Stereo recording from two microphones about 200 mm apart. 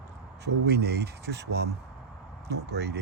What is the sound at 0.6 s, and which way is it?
Speech, 55° right (ahead or behind).